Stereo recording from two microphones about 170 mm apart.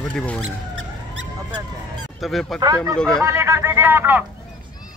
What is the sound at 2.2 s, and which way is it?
Speech, centre (ahead or behind).